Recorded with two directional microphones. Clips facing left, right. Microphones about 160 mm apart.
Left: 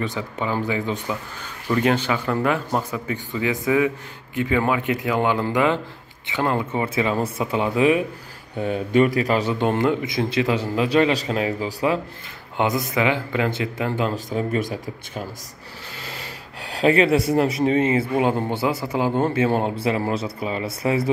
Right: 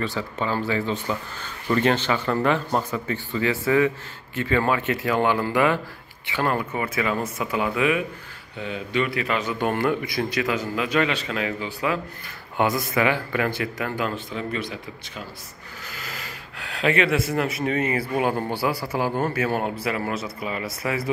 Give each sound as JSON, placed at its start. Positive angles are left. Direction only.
{"t": 0.0, "sound": "speech", "side_deg": 20}
{"t": 8.5, "sound": "a man's voice", "side_deg": 50}
{"t": 12.5, "sound": "speech", "side_deg": 20}
{"t": 16.0, "sound": "speech", "side_deg": 30}